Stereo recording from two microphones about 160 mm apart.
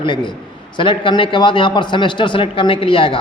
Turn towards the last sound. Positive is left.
turn(degrees=35)  # may be behind; listen again after turning